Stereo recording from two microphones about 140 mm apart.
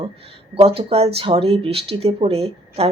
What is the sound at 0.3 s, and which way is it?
Speech, 40° right (ahead or behind).